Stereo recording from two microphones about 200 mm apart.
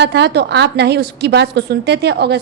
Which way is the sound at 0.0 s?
60° right (ahead or behind).